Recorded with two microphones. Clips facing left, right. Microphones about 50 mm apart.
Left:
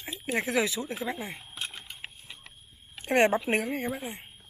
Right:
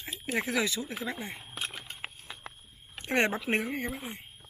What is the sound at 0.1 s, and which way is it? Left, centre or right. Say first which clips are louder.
Speech: left 2 dB; centre.